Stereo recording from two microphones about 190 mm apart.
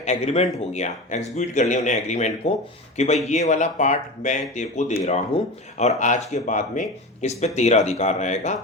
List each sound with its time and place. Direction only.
0.0 s speech: 35° left (ahead or behind)